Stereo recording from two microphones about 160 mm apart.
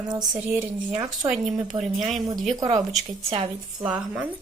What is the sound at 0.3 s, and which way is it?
Speech, 15° right (ahead or behind).